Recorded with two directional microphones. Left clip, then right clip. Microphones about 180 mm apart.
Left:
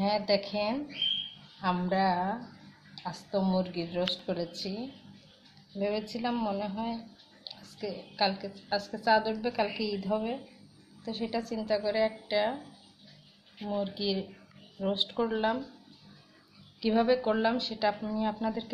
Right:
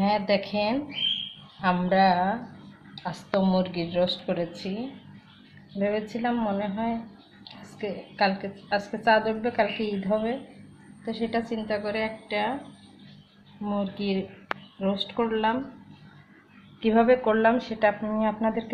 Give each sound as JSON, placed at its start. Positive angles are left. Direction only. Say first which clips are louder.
{"t": 0.0, "sound": "a woman's voice", "louder": "right 4 dB", "side_deg": 5}
{"t": 5.8, "sound": "a woman's voice", "louder": "right 5 dB", "side_deg": 15}
{"t": 13.7, "sound": "a woman's voice", "louder": "right 2 dB", "side_deg": 20}
{"t": 16.8, "sound": "a woman's voice", "louder": "right 6 dB", "side_deg": 10}